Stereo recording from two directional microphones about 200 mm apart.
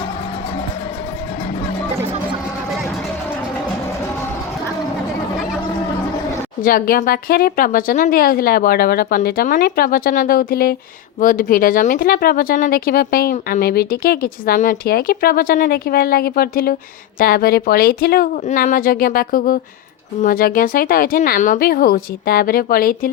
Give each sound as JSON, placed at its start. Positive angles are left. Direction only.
{"t": 6.6, "sound": "speech", "side_deg": 45}